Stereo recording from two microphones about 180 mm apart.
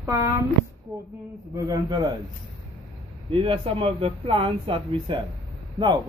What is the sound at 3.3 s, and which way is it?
Speech, 30° right (ahead or behind).